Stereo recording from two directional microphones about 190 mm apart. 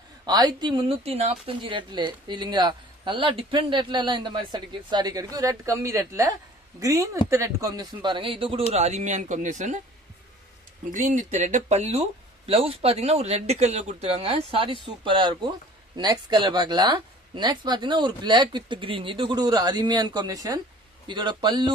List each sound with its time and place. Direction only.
0.3 s a woman's voice: 20° right (ahead or behind); by 9.8 s 40° right (ahead or behind)
10.9 s speech: 40° right (ahead or behind); by 21.7 s 25° right (ahead or behind)